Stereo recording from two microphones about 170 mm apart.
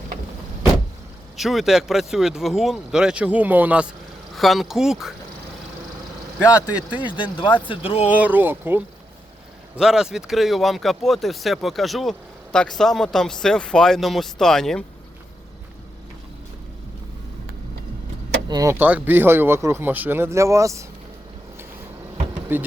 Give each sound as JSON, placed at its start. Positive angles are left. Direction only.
{"t": 1.4, "sound": "speech", "side_deg": 0}
{"t": 6.5, "sound": "speech", "side_deg": 25}
{"t": 8.0, "sound": "speech", "side_deg": -10}
{"t": 18.4, "sound": "speech", "side_deg": -20}
{"t": 22.5, "sound": "speech", "side_deg": -10}